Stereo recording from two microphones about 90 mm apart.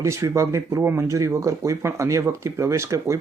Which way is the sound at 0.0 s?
35° right (ahead or behind).